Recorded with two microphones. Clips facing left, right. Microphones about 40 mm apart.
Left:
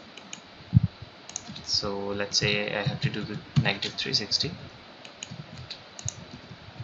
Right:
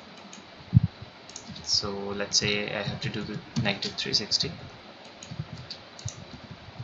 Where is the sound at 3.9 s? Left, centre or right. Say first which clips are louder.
Even; centre.